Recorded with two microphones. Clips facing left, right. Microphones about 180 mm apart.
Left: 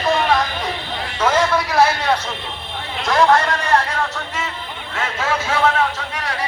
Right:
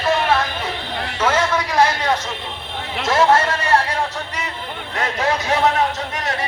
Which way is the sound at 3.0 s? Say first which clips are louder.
Even; 5° right (ahead or behind).